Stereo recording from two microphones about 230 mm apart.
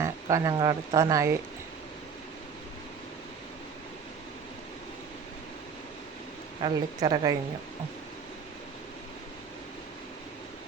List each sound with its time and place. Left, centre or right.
0.0 s speech: centre
6.6 s a woman's voice: centre